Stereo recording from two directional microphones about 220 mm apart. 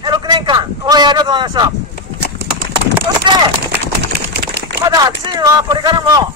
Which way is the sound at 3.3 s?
20° right (ahead or behind).